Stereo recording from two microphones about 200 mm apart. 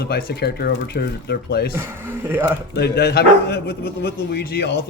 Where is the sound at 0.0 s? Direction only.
50° left (ahead or behind).